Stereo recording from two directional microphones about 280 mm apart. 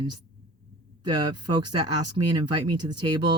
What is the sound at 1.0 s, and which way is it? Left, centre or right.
Speech, centre.